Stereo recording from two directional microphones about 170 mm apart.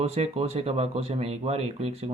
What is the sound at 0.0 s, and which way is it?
Speech, 35° right (ahead or behind).